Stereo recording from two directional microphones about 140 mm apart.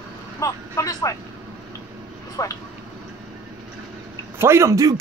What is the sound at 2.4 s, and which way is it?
Speech, 25° left (ahead or behind).